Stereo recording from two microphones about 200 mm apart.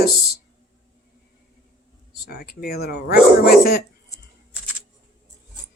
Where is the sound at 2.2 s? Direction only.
50° left (ahead or behind).